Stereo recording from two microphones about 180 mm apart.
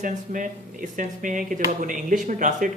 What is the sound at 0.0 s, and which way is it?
Speech, 45° right (ahead or behind).